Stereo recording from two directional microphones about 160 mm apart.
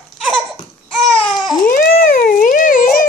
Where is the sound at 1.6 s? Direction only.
65° left (ahead or behind).